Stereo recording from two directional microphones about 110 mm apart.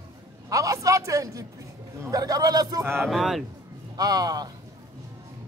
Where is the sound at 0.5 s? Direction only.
30° right (ahead or behind).